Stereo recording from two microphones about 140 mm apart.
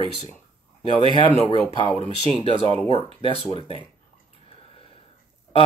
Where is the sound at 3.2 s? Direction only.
40° left (ahead or behind).